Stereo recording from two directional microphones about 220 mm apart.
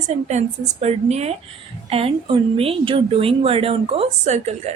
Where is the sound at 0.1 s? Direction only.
30° right (ahead or behind).